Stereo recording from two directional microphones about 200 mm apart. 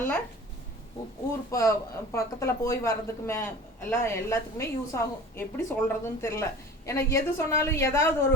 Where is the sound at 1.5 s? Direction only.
15° left (ahead or behind).